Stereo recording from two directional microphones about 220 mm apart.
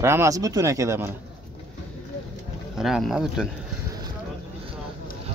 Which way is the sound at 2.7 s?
Centre (ahead or behind).